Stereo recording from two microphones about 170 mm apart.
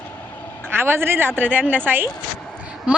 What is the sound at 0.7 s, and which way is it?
A woman's voice, 15° right (ahead or behind).